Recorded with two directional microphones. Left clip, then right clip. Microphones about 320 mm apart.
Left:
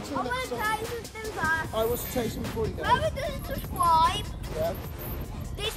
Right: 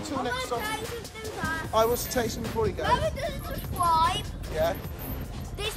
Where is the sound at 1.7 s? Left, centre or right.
Right.